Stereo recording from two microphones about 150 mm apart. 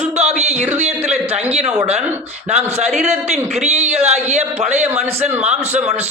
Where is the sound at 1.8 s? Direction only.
45° right (ahead or behind).